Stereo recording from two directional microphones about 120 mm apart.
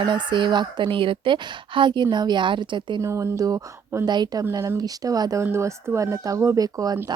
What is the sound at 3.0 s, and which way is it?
Speech, 25° right (ahead or behind).